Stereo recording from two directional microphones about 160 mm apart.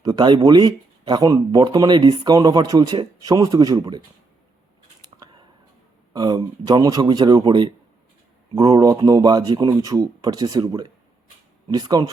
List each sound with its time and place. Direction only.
0.0 s speech: 25° right (ahead or behind)
6.1 s speech: 25° right (ahead or behind)